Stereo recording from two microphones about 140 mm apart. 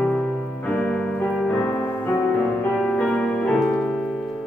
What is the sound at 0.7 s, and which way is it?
Piano, 10° left (ahead or behind).